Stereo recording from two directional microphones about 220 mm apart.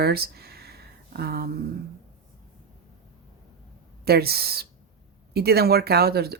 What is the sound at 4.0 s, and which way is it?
Speech, 45° right (ahead or behind).